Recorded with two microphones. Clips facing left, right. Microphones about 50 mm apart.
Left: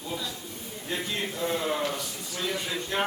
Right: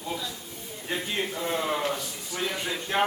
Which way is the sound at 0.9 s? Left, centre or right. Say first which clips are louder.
Right 2 dB; centre.